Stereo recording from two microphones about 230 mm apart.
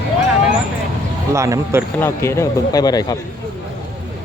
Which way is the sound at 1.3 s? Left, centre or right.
Centre.